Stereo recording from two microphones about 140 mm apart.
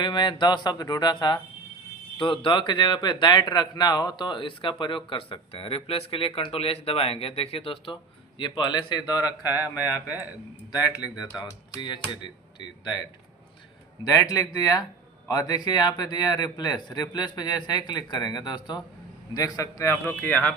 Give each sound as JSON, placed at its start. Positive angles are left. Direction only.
{"t": 0.0, "sound": "speech", "side_deg": 35}